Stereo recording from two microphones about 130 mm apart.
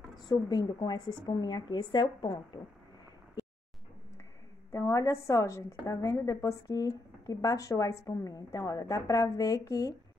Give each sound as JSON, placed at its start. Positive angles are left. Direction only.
{"t": 0.3, "sound": "speech", "side_deg": 30}
{"t": 4.7, "sound": "a woman's voice", "side_deg": 25}